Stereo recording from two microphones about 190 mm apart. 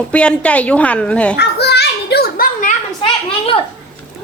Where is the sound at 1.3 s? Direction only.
60° left (ahead or behind).